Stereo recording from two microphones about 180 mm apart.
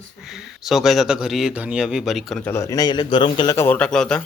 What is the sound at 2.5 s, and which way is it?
Speech, 15° left (ahead or behind).